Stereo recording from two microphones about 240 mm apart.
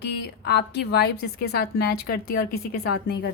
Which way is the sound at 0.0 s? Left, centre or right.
Left.